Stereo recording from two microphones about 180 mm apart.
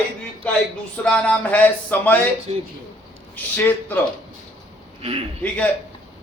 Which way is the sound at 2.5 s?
35° right (ahead or behind).